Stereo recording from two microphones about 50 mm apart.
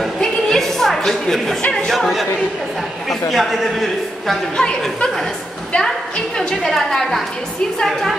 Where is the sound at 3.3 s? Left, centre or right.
Centre.